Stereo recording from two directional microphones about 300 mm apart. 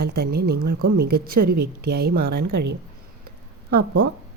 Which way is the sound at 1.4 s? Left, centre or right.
Right.